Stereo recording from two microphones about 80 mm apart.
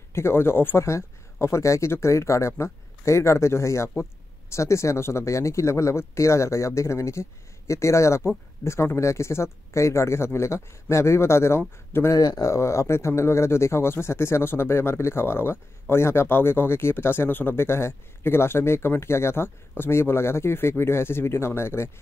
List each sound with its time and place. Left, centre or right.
0.1 s speech: left
12.1 s speech: left
12.4 s speech: left